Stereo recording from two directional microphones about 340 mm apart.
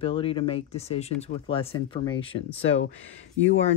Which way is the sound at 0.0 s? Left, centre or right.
Centre.